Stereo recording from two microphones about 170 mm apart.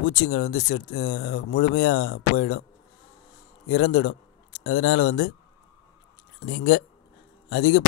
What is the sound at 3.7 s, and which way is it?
Speech, 60° left (ahead or behind).